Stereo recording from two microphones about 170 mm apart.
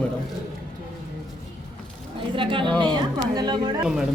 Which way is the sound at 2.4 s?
30° right (ahead or behind).